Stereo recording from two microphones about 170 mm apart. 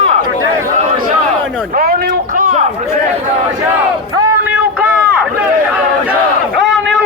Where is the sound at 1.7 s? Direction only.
60° right (ahead or behind).